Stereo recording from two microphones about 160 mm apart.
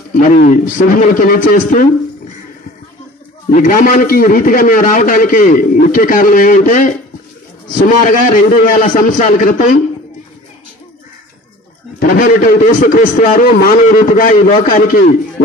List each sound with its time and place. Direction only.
0.1 s a man's voice: 55° left (ahead or behind)
3.4 s a man's voice: 65° left (ahead or behind)
8.0 s a man's voice: 55° left (ahead or behind)
12.0 s a man's voice: 55° left (ahead or behind)